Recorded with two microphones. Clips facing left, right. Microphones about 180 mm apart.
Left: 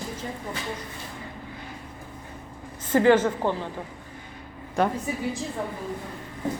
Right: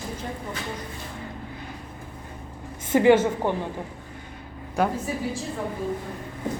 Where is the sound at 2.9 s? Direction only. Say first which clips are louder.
Right 1 dB; 10° right (ahead or behind).